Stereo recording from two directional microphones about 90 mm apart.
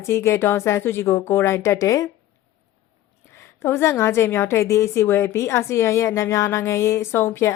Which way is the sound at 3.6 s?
30° left (ahead or behind).